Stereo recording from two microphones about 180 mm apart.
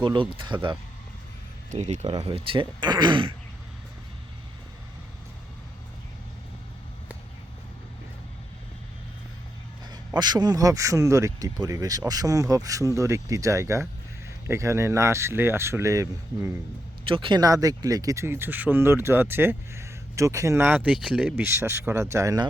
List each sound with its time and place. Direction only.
0.0 s speech: 25° right (ahead or behind)
1.7 s speech: 40° right (ahead or behind)
10.2 s speech: 25° right (ahead or behind)
17.0 s speech: 30° right (ahead or behind)